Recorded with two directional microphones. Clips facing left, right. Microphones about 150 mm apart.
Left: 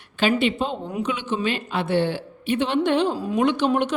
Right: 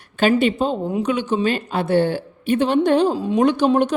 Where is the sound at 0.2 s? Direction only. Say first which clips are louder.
Right 4 dB; 45° right (ahead or behind).